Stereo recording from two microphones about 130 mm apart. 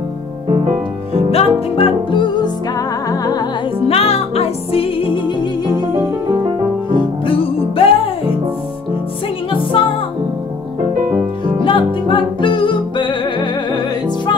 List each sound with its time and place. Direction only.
1.3 s music: 45° left (ahead or behind); by 3.4 s 30° left (ahead or behind)
3.8 s music: 50° left (ahead or behind)
7.2 s music: 45° left (ahead or behind)
9.5 s music: 40° left (ahead or behind)
11.6 s music: 40° left (ahead or behind)